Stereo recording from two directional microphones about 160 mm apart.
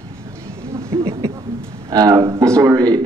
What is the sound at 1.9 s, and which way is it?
Speech, 25° right (ahead or behind).